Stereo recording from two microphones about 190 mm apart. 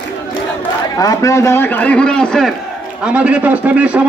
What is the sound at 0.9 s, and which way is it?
A man's voice, 15° left (ahead or behind).